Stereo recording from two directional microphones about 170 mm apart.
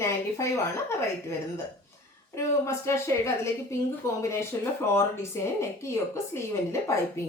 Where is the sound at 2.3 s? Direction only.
15° left (ahead or behind).